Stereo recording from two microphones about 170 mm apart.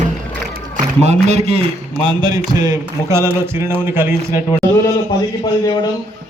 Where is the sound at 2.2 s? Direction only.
25° right (ahead or behind).